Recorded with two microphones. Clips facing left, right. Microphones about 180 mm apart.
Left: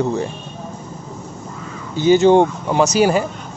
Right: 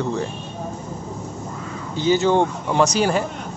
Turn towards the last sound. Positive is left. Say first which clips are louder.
# left 4 dB
turn(degrees=5)  # may be behind; listen again after turning